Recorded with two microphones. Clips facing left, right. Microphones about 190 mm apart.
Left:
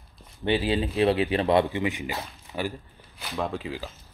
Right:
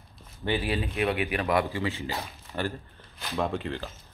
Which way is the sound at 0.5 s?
25° left (ahead or behind).